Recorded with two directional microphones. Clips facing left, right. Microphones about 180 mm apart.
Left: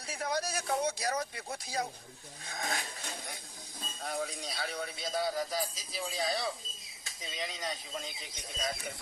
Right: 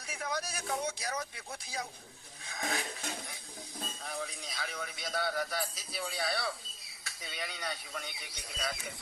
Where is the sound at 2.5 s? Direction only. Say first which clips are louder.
Even; 45° left (ahead or behind).